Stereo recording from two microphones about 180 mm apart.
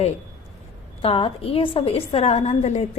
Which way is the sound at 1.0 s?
30° left (ahead or behind).